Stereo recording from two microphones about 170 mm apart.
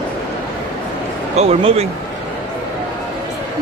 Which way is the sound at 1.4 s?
35° right (ahead or behind).